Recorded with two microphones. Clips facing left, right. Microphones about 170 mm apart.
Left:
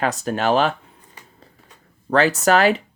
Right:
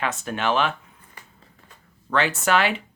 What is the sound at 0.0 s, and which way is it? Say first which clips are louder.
Speech: left 5 dB; 40° left (ahead or behind).